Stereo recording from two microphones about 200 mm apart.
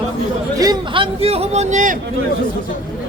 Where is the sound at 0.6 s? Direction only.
20° right (ahead or behind); by 2.0 s 40° right (ahead or behind).